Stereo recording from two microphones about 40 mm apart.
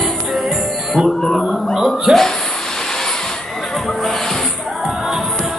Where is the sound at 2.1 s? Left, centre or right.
Centre.